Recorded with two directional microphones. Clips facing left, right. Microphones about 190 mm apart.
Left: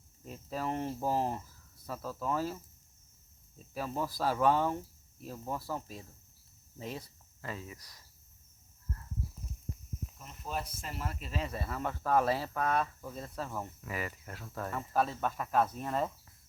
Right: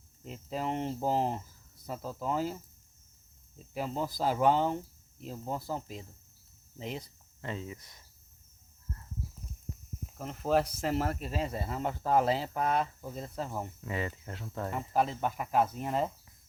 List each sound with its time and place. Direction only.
0.3 s speech: 20° right (ahead or behind)
3.8 s speech: 20° right (ahead or behind)
10.2 s speech: 85° right; by 11.2 s 70° right (ahead or behind)
11.2 s speech: 35° right (ahead or behind); by 16.1 s 20° right (ahead or behind)